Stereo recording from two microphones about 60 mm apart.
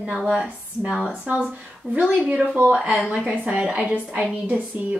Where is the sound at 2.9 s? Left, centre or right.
Centre.